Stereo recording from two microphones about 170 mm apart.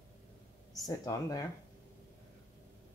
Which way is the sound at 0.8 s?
20° left (ahead or behind).